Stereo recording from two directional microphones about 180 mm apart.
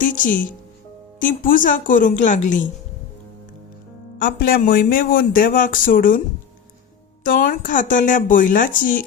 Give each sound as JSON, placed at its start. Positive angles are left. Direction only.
{"t": 0.0, "sound": "speech", "side_deg": 45}
{"t": 4.2, "sound": "speech", "side_deg": 50}
{"t": 7.3, "sound": "speech", "side_deg": 45}